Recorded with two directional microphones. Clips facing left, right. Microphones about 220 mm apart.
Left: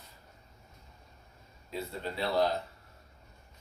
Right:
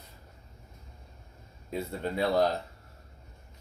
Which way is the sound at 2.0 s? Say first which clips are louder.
Right 4 dB; 50° right (ahead or behind).